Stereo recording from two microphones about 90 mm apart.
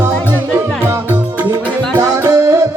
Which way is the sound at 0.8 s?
30° right (ahead or behind).